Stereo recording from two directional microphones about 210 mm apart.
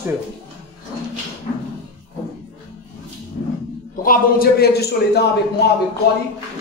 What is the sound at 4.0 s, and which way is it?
A man's voice, 45° left (ahead or behind).